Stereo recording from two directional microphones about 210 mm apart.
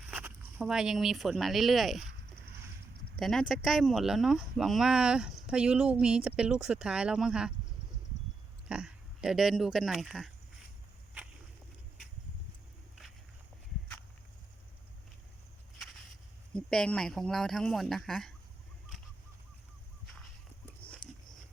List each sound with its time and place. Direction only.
0.1 s speech: 10° right (ahead or behind)
3.2 s speech: centre (ahead or behind)
8.7 s speech: 5° right (ahead or behind)
16.6 s speech: 5° left (ahead or behind)
21.0 s a sound: 20° left (ahead or behind)